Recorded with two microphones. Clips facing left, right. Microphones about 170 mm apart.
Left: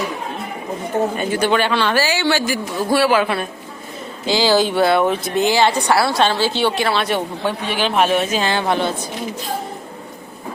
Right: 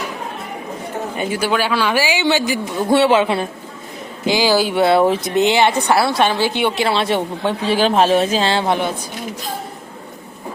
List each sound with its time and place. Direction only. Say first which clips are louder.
1.1 s a woman's voice: left 2 dB; 10° right (ahead or behind)
4.7 s a woman's voice: right 2 dB; 25° right (ahead or behind)